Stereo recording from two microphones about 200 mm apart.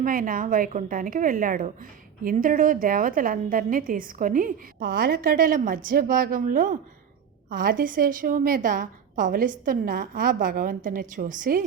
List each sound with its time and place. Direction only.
0.0 s a woman's voice: 45° right (ahead or behind)